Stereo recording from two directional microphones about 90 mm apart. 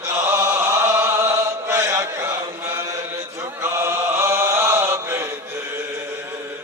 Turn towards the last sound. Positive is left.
turn(degrees=-25)  # may be behind; listen again after turning